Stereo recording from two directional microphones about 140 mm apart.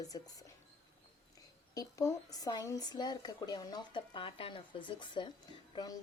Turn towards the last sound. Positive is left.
turn(degrees=25)  # may be behind; listen again after turning